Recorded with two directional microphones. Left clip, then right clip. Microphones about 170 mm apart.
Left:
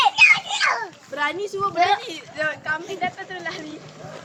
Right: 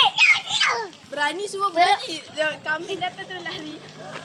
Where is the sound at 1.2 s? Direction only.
55° right (ahead or behind).